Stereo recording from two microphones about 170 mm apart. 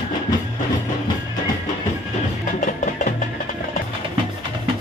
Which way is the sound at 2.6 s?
50° left (ahead or behind).